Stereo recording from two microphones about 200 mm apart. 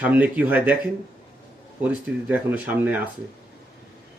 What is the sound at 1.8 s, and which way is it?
Speech, 10° right (ahead or behind).